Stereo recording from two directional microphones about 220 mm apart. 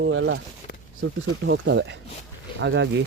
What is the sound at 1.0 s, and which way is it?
Speech, 55° right (ahead or behind).